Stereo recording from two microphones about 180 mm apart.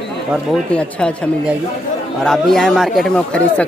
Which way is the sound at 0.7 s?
5° left (ahead or behind).